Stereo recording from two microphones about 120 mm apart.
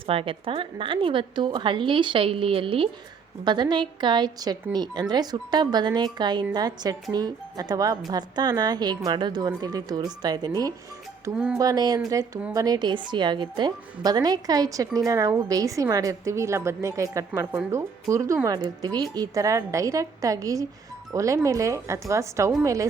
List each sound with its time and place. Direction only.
0.1 s a woman's voice: 50° right (ahead or behind)
3.4 s a woman's voice: 40° right (ahead or behind)
11.5 s a woman's voice: 30° right (ahead or behind)